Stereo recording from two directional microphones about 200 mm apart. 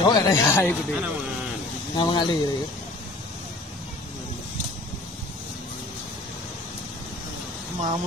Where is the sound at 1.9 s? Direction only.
25° left (ahead or behind).